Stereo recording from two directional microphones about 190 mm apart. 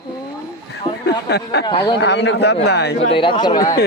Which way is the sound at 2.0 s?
65° left (ahead or behind).